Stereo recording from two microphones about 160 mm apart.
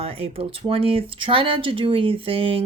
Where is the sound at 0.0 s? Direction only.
35° right (ahead or behind).